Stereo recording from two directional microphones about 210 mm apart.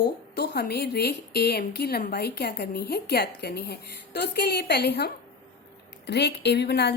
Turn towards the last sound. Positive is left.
turn(degrees=55)  # may be behind; listen again after turning